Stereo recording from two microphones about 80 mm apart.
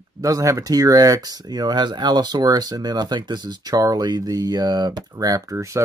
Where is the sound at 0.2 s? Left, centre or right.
Right.